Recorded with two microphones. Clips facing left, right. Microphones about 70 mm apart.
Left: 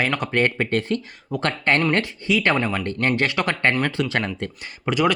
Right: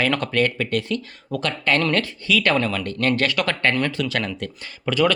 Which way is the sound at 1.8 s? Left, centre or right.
Left.